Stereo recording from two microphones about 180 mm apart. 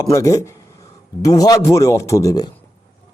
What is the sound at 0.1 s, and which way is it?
A man's voice, 15° left (ahead or behind).